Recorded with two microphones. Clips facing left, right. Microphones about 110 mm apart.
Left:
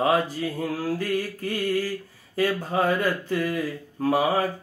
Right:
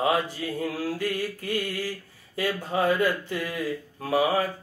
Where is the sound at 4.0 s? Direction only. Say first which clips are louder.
Left 2 dB; 40° left (ahead or behind).